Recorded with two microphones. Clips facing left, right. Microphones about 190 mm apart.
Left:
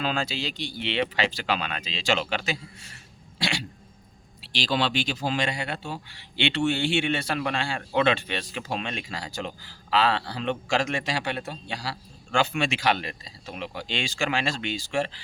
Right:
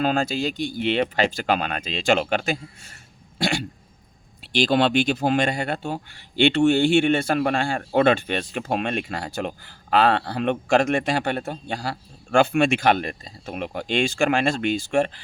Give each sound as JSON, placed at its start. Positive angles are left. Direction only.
{"t": 0.0, "sound": "speech", "side_deg": -50}